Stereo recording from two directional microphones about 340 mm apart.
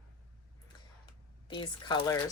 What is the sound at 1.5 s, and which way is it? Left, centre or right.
Speech, centre.